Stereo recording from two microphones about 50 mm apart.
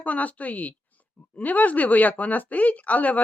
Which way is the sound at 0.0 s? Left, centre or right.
Left.